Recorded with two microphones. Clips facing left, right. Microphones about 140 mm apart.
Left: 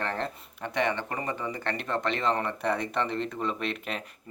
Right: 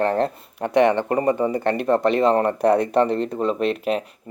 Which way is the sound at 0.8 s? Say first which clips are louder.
Right 12 dB; 55° right (ahead or behind).